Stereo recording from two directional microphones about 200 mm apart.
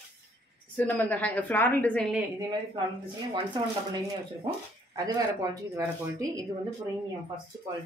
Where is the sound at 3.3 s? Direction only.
20° right (ahead or behind).